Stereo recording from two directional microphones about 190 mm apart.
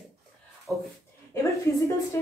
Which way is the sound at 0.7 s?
Centre (ahead or behind).